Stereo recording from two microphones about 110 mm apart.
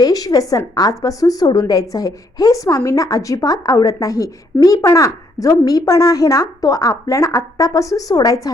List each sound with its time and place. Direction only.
0.0 s a woman's voice: 35° left (ahead or behind)